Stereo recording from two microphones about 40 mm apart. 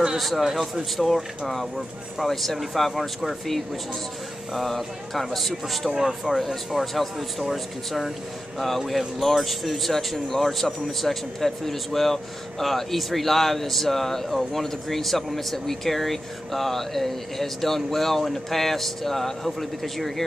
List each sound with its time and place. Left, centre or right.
0.2 s speech: centre
2.1 s speech: centre
5.9 s speech: centre
6.3 s speech: centre